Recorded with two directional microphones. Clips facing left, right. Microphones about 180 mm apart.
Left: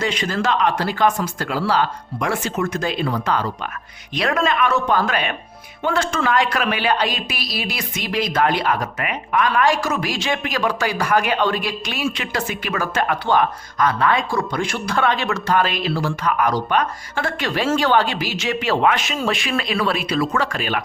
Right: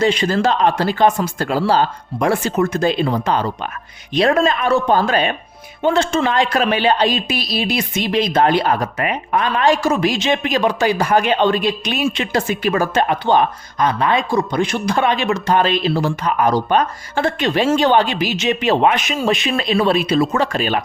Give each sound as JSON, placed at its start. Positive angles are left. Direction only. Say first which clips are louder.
{"t": 0.0, "sound": "a woman's voice", "louder": "right 6 dB", "side_deg": -30}